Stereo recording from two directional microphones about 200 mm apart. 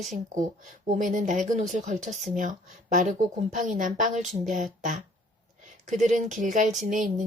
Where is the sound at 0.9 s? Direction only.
40° right (ahead or behind).